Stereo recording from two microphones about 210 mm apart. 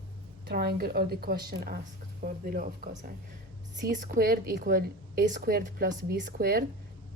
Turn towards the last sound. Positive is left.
turn(degrees=-45)  # may be behind; listen again after turning